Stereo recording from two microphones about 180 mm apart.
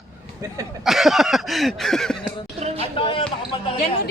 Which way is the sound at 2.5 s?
35° right (ahead or behind).